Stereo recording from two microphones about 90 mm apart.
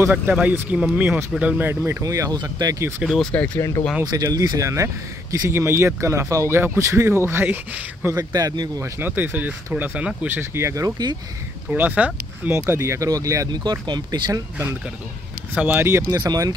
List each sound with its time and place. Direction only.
0.1 s speech: 15° right (ahead or behind)
1.9 s speech: 35° right (ahead or behind)
3.1 s speech: 5° left (ahead or behind)
3.5 s speech: 40° left (ahead or behind)
4.2 s speech: 40° right (ahead or behind)
8.4 s speech: 45° right (ahead or behind)
9.0 s speech: 20° right (ahead or behind)
11.7 s speech: 15° right (ahead or behind)
12.5 s speech: 30° right (ahead or behind)
13.7 s speech: 55° right (ahead or behind)
15.5 s speech: 20° right (ahead or behind)
16.1 s speech: 45° right (ahead or behind)